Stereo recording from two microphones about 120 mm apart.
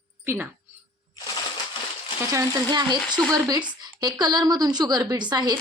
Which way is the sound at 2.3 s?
30° right (ahead or behind).